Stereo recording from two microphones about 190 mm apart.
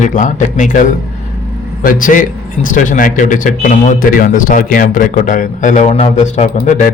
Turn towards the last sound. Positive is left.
turn(degrees=40)  # may be behind; listen again after turning